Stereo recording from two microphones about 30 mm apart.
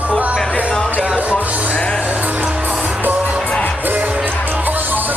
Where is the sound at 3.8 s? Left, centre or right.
Right.